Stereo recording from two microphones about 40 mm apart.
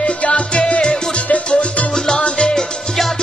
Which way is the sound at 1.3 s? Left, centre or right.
Left.